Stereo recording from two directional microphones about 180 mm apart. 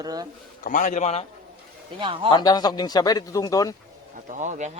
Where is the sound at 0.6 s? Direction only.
45° left (ahead or behind).